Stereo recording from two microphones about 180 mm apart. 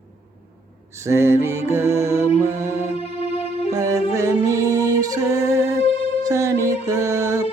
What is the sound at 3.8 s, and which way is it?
Music, 20° right (ahead or behind).